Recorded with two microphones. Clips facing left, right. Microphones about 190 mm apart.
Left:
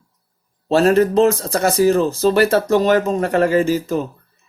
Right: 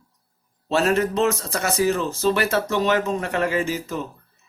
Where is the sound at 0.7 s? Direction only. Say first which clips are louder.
Left 7 dB; 35° left (ahead or behind).